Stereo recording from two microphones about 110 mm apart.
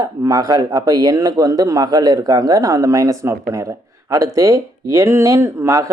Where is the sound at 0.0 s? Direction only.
35° right (ahead or behind).